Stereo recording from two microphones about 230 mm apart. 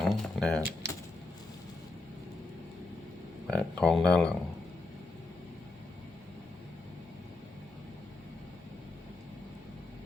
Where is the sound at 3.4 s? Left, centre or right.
Centre.